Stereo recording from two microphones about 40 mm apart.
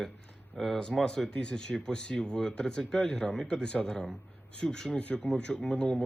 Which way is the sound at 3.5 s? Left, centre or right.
Left.